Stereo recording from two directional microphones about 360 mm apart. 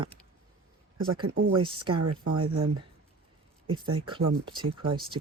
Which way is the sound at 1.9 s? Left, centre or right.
Right.